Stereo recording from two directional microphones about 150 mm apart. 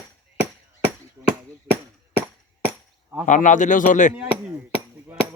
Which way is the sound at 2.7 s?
15° right (ahead or behind).